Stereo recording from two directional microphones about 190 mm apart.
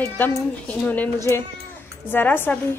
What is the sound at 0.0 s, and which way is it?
A woman's voice, 10° left (ahead or behind).